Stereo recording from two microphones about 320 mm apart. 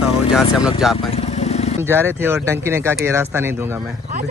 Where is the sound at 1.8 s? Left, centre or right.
Centre.